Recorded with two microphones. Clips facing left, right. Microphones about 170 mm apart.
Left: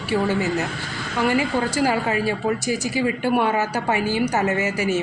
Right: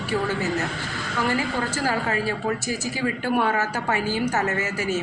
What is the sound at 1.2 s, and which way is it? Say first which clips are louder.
Speech: left 5 dB; 15° left (ahead or behind).